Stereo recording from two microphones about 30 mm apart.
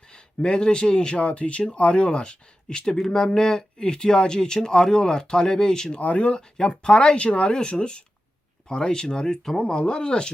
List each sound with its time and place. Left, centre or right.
0.1 s speech: left
1.2 s speech: left
6.0 s speech: left
6.8 s speech: left
7.2 s speech: left
7.5 s speech: left